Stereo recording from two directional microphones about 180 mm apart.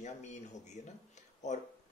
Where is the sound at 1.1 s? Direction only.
40° left (ahead or behind).